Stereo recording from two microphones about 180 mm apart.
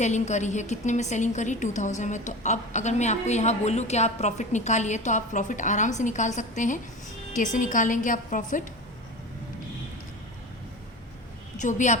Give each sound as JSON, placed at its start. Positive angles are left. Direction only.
{"t": 0.0, "sound": "a woman's voice", "side_deg": 40}
{"t": 11.5, "sound": "a woman's voice", "side_deg": 40}